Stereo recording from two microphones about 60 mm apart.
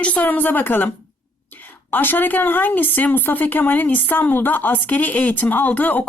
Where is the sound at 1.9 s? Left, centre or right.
Left.